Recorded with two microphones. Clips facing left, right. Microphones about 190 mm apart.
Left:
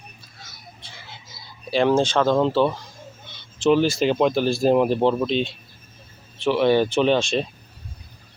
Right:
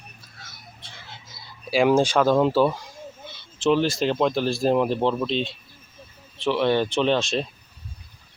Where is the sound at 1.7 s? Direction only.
10° right (ahead or behind).